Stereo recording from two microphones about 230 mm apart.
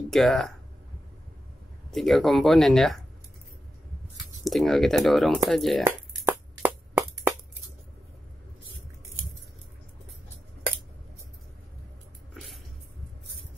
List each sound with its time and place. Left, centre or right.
0.1 s speech: centre
1.9 s speech: centre
4.5 s speech: centre
5.9 s a sound: centre